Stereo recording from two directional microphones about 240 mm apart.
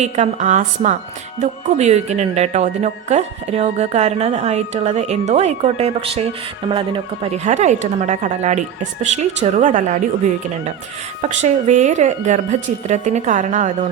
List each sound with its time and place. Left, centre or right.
0.0 s speech: right
11.2 s speech: right